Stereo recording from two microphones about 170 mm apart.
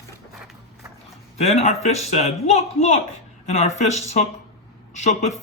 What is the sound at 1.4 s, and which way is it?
Speech, 40° left (ahead or behind).